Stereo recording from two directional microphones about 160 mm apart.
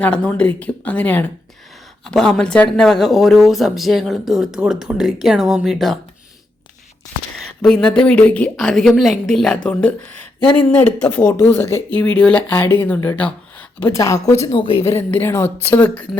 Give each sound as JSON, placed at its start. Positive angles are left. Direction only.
{"t": 0.0, "sound": "speech", "side_deg": 10}
{"t": 7.6, "sound": "speech", "side_deg": 5}